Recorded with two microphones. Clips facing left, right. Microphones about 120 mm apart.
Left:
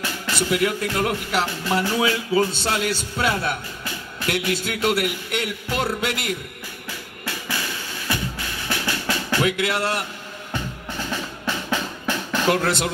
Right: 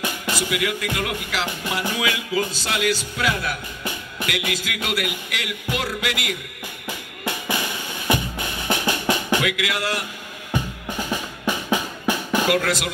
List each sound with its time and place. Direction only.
0.5 s speech: 40° left (ahead or behind)
3.8 s music: 20° right (ahead or behind)
4.5 s speech: 35° left (ahead or behind)
6.9 s drum: 20° right (ahead or behind)
9.4 s speech: 35° left (ahead or behind)
10.5 s drum: 15° right (ahead or behind)
12.4 s speech: 30° left (ahead or behind)